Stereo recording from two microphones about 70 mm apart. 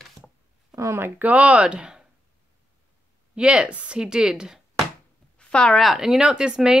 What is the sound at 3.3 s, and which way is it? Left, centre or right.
Speech, centre.